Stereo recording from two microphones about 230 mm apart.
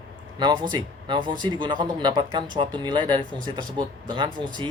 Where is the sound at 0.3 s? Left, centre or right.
Centre.